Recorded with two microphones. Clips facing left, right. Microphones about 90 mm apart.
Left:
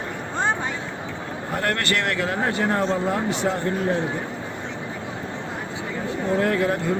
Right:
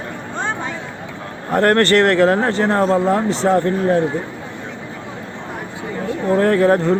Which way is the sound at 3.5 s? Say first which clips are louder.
Right 11 dB; 65° right (ahead or behind).